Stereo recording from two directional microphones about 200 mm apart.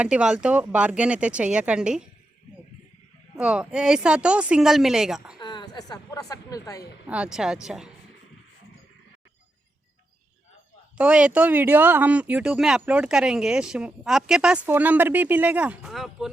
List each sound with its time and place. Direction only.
0.0 s speech: 5° right (ahead or behind)
3.3 s speech: 5° right (ahead or behind)
5.4 s a woman's voice: 20° left (ahead or behind)
7.1 s speech: 5° right (ahead or behind)
10.9 s speech: 5° right (ahead or behind)